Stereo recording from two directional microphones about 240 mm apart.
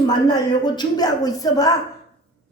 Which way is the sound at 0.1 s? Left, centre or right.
Centre.